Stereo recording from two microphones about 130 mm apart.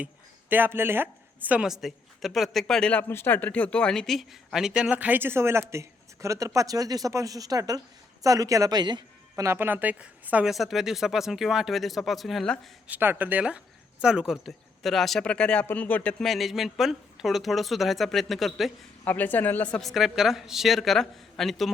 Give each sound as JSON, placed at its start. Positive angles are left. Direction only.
{"t": 0.5, "sound": "a woman's voice", "side_deg": -15}
{"t": 9.3, "sound": "speech", "side_deg": -20}
{"t": 12.9, "sound": "speech", "side_deg": -15}
{"t": 19.0, "sound": "speech", "side_deg": 15}